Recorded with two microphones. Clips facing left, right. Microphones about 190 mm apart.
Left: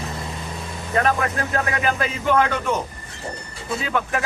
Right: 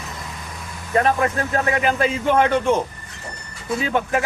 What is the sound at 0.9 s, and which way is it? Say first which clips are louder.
A man's voice: right 2 dB; 25° right (ahead or behind).